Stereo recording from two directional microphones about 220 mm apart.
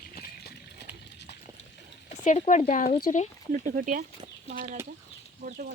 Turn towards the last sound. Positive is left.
turn(degrees=-40)  # may be behind; listen again after turning